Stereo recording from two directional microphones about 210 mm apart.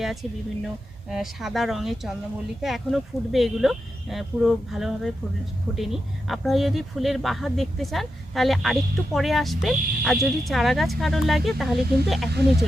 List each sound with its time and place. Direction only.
0.0 s speech: centre (ahead or behind)
12.3 s speech: 50° right (ahead or behind)